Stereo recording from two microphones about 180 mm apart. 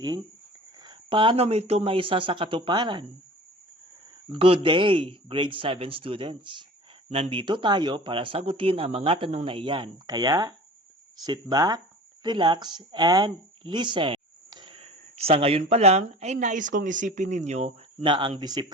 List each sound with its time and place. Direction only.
0.8 s speech: 25° right (ahead or behind)
4.3 s speech: 30° right (ahead or behind)